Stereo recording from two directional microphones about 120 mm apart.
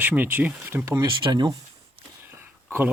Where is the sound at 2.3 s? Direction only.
20° right (ahead or behind).